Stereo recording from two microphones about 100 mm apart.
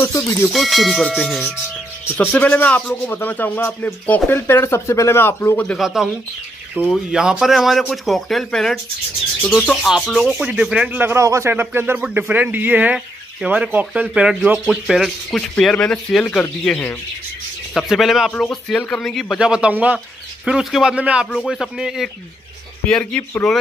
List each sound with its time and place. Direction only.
0.0 s speech: 30° left (ahead or behind)
0.5 s speech: centre (ahead or behind)
2.1 s speech: 15° left (ahead or behind)
5.8 s speech: 5° right (ahead or behind)
9.8 s speech: 5° right (ahead or behind)
11.0 s speech: 20° right (ahead or behind)
14.7 s speech: centre (ahead or behind); by 16.9 s 15° left (ahead or behind)
17.7 s speech: centre (ahead or behind)
19.3 s speech: 10° right (ahead or behind)
22.8 s speech: 10° left (ahead or behind)
23.4 s speech: centre (ahead or behind)